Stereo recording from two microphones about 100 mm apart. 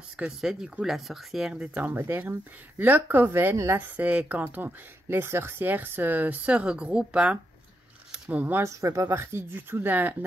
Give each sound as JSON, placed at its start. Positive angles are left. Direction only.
{"t": 0.2, "sound": "speech", "side_deg": -5}
{"t": 8.6, "sound": "speech", "side_deg": -30}